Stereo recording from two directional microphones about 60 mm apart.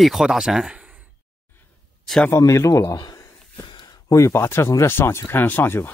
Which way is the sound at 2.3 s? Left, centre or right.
Left.